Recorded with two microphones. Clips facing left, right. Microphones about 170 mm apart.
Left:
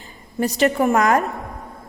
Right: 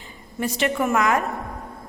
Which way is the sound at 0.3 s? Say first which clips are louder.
Left 5 dB; 40° left (ahead or behind).